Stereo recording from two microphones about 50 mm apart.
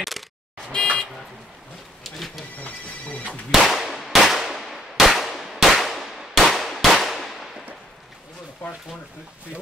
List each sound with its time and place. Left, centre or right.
0.7 s buzzer: left
2.0 s speech: centre
3.5 s clang: centre
8.6 s speech: left